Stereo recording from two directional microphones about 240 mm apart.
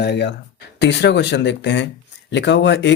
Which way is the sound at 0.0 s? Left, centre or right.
Left.